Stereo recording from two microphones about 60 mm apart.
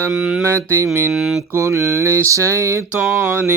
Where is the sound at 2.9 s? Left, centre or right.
Right.